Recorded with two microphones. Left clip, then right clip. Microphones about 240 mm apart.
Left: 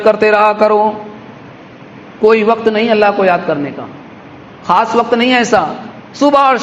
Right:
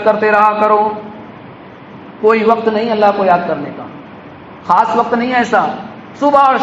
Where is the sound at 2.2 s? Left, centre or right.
Left.